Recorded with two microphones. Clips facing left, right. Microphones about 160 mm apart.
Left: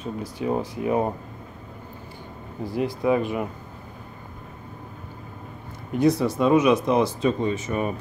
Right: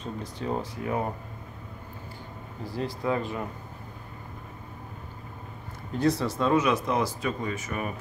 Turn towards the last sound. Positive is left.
turn(degrees=25)  # may be behind; listen again after turning